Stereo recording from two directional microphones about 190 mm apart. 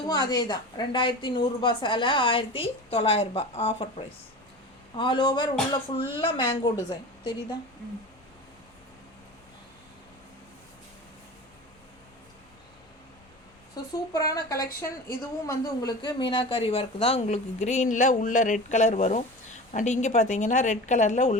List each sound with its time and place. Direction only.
0.1 s a woman's voice: 20° left (ahead or behind)
14.1 s a woman's voice: 20° left (ahead or behind); by 21.3 s 40° left (ahead or behind)